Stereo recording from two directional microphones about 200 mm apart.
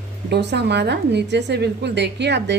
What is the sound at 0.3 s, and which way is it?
A woman's voice, 55° right (ahead or behind).